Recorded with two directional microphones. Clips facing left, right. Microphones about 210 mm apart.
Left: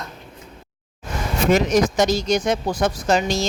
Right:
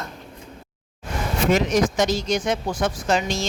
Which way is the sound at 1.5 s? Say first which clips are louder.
Left 3 dB; 40° left (ahead or behind).